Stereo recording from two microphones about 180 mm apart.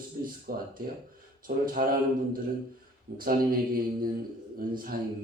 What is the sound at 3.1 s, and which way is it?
Speech, 50° right (ahead or behind).